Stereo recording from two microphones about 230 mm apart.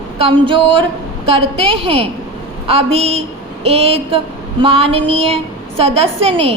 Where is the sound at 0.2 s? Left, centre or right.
Right.